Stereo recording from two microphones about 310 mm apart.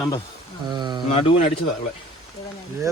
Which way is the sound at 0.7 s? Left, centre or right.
Centre.